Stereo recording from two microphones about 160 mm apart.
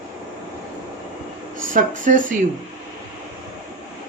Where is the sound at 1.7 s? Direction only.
55° right (ahead or behind).